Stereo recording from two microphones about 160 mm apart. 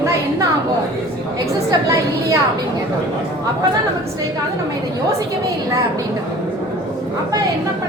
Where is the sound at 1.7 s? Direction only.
20° right (ahead or behind).